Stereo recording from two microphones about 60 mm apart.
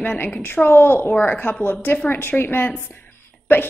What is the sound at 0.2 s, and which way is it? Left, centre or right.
Speech, left.